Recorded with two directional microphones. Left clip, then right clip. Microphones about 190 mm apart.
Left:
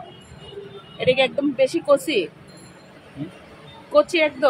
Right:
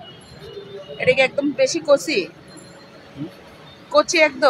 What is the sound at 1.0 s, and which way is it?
Speech, 10° left (ahead or behind).